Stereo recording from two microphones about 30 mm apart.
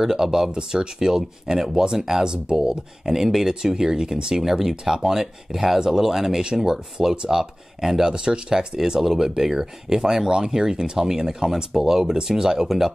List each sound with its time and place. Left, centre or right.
0.0 s speech: centre
0.5 s speech: right
0.9 s speech: centre
3.1 s speech: centre
3.8 s speech: right
4.4 s speech: centre
6.4 s speech: right
8.0 s speech: right